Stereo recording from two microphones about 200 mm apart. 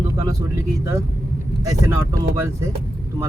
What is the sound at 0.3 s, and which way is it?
Speech, 15° right (ahead or behind).